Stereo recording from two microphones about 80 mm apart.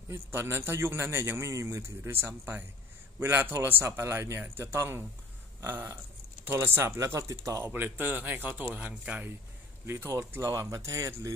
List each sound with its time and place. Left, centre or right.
0.1 s a man's voice: right
7.1 s speech: right
7.6 s a man's voice: right
9.8 s a man's voice: right